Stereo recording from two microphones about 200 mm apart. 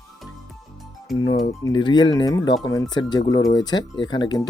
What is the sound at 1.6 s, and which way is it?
Speech, 20° left (ahead or behind).